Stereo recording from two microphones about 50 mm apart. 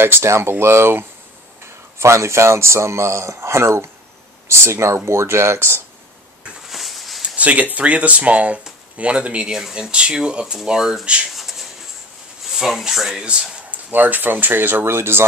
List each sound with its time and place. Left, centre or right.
0.0 s speech: right
2.0 s a man's voice: right
6.7 s a sound: centre
7.3 s speech: right
9.5 s speech: centre
9.8 s speech: right
10.8 s speech: centre
11.3 s a sound: centre
12.4 s speech: centre
13.7 s speech: right